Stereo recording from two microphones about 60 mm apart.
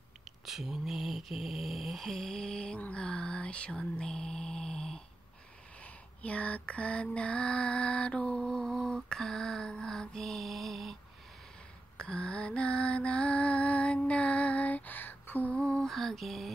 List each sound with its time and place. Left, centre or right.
0.5 s mantra: centre
5.8 s lullaby: left; by 11.0 s centre
12.0 s lullaby: centre; by 15.5 s left
15.5 s lullaby: centre
15.9 s mantra: centre